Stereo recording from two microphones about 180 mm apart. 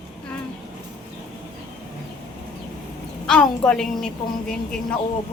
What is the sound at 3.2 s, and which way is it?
Speech, 5° left (ahead or behind).